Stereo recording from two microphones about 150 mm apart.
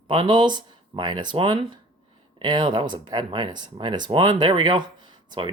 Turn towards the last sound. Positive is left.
turn(degrees=-30)  # may be behind; listen again after turning